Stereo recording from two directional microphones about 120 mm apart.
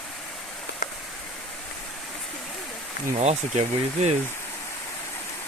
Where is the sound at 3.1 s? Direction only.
65° right (ahead or behind).